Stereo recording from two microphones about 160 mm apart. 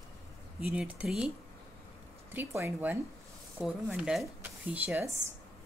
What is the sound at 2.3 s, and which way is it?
Speech, 15° right (ahead or behind).